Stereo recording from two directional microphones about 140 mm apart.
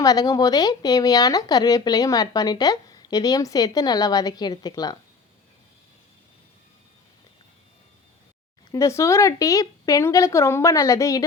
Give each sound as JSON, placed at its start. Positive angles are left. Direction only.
{"t": 0.0, "sound": "speech", "side_deg": 25}
{"t": 8.7, "sound": "speech", "side_deg": 20}